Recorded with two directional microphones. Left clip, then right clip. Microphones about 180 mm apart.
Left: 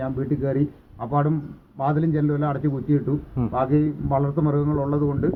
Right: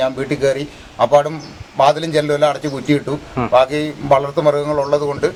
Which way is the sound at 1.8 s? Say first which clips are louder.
Right 10 dB; 15° right (ahead or behind).